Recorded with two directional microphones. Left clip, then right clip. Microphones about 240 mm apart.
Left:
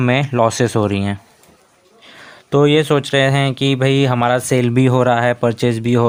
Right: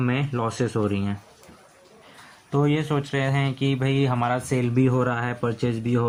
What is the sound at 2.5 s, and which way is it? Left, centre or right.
Speech, left.